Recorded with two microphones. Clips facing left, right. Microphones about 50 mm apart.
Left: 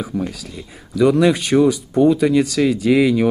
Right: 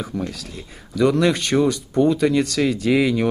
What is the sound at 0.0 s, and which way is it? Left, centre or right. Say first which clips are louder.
Speech: left 3 dB; centre.